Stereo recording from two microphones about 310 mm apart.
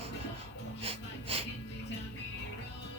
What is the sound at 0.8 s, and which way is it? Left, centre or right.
Gasp, centre.